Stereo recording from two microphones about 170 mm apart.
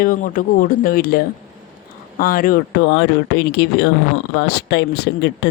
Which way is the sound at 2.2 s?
55° left (ahead or behind).